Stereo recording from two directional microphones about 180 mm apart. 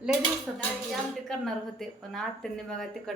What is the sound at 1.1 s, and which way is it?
A woman's voice, centre (ahead or behind).